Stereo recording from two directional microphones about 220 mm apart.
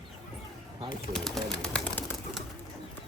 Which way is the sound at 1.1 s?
Centre (ahead or behind).